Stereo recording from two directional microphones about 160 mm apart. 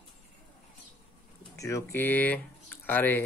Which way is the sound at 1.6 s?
15° left (ahead or behind).